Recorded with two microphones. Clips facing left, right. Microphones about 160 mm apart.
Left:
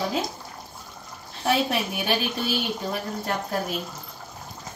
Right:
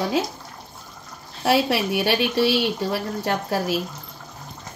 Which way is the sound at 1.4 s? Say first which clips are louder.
Right 4 dB; 85° right.